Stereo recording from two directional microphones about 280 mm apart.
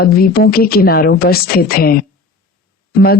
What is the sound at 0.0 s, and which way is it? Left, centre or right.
Speech, left.